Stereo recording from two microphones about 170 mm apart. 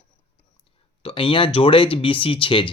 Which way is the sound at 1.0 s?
30° left (ahead or behind).